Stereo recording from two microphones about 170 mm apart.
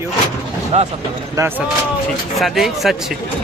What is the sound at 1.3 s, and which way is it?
Speech, 15° right (ahead or behind).